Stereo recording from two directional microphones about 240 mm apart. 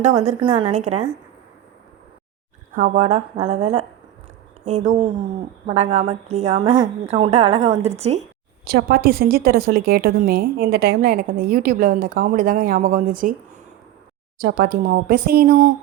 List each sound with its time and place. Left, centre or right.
0.0 s a woman's voice: right
2.7 s a woman's voice: right
8.6 s a woman's voice: right
14.3 s a woman's voice: right